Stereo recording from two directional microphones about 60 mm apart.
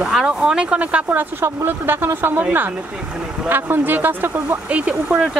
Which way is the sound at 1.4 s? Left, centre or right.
Right.